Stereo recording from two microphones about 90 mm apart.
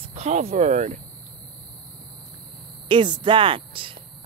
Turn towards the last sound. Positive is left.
turn(degrees=-75)  # may be behind; listen again after turning